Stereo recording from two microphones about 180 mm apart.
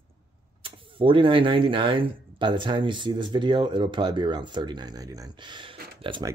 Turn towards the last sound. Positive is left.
turn(degrees=-25)  # may be behind; listen again after turning